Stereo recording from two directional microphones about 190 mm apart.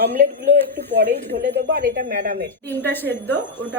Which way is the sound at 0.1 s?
50° right (ahead or behind).